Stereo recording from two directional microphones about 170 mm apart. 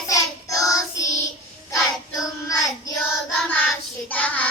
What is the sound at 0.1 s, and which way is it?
Child singing, 20° left (ahead or behind).